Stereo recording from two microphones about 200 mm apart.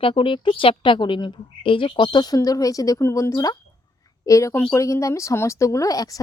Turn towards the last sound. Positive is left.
turn(degrees=20)  # may be behind; listen again after turning